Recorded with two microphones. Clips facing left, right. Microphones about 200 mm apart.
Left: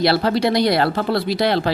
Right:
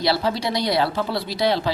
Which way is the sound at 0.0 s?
65° left (ahead or behind).